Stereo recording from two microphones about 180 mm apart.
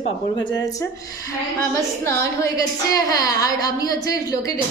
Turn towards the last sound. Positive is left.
turn(degrees=20)  # may be behind; listen again after turning